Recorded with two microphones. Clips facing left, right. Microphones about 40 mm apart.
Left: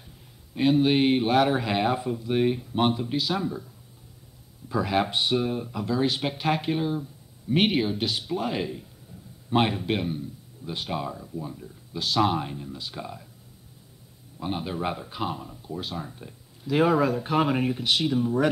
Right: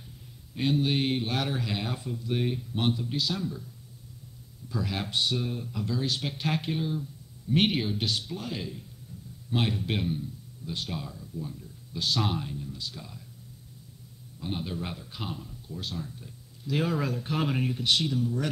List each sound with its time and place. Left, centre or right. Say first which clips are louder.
0.6 s speech: left 6 dB; centre
8.5 s speech: left 7 dB; left
9.8 s speech: left 3 dB; centre
10.7 s speech: left 5 dB; centre
11.1 s speech: left 5 dB; left
12.0 s speech: left 6 dB; centre
12.4 s speech: left 4 dB; left
14.4 s speech: left 5 dB; centre
16.1 s speech: left 3 dB; left
16.6 s speech: left 7 dB; centre